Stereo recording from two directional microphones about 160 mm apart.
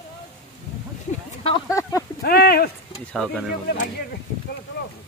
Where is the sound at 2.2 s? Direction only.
70° left (ahead or behind).